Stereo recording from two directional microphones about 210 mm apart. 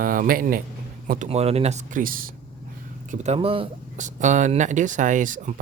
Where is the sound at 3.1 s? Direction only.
30° right (ahead or behind).